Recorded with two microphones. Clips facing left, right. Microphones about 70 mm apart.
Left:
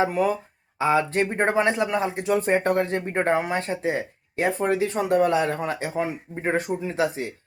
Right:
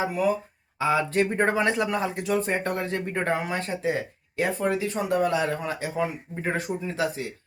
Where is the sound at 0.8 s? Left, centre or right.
Left.